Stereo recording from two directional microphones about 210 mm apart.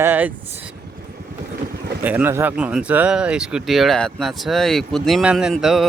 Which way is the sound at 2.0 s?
10° right (ahead or behind).